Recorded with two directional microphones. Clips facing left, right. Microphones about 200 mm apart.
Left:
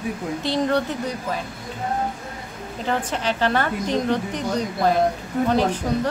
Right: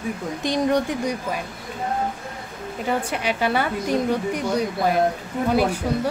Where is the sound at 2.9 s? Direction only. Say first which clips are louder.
Even; 10° right (ahead or behind).